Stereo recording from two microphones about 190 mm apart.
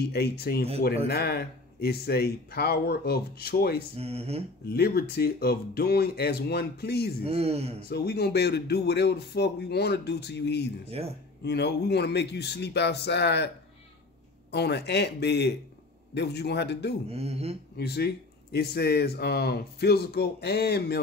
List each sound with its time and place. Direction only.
0.0 s speech: 60° left (ahead or behind)
4.0 s speech: 30° right (ahead or behind)
4.6 s speech: 55° left (ahead or behind)
7.2 s speech: 30° right (ahead or behind)
7.9 s speech: 55° left (ahead or behind)
14.5 s speech: 60° left (ahead or behind)
17.1 s speech: 30° right (ahead or behind)
17.7 s speech: 60° left (ahead or behind)